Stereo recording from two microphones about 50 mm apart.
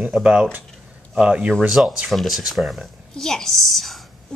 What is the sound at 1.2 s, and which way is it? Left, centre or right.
Speech, right.